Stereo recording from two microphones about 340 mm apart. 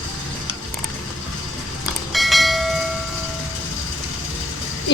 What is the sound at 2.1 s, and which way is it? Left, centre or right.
Train, centre.